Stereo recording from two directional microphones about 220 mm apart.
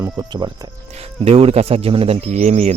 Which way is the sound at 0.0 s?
15° right (ahead or behind).